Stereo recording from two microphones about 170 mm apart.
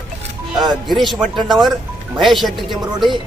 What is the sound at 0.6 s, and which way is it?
Speech, 25° right (ahead or behind).